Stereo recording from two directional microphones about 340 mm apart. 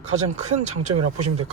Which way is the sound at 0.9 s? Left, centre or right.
Right.